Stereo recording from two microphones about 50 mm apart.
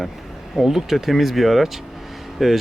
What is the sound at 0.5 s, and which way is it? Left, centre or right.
Speech, centre.